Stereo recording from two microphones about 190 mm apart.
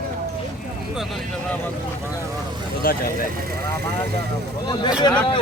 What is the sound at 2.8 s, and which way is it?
Speech, 50° left (ahead or behind).